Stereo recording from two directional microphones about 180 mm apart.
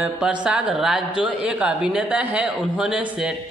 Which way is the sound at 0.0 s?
5° right (ahead or behind).